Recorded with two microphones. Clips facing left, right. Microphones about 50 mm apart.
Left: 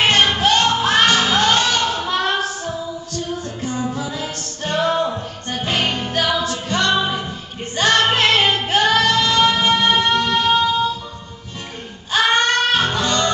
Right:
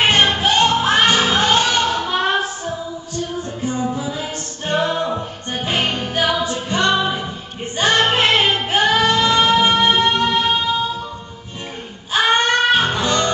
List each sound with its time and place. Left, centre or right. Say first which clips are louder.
0.0 s music: even; centre
12.1 s music: even; centre